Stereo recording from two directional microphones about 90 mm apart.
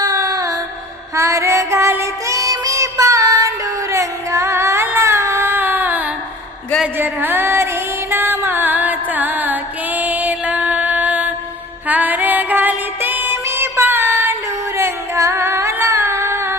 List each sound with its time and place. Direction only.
0.0 s music: 40° right (ahead or behind); by 14.3 s 25° right (ahead or behind)
14.8 s female singing: 30° right (ahead or behind)